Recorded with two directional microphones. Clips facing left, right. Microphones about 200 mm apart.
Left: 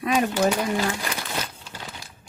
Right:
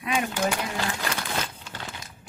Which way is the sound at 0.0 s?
40° left (ahead or behind).